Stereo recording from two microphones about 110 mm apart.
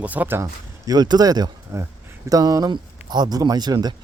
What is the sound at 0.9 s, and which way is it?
A man's voice, 40° right (ahead or behind).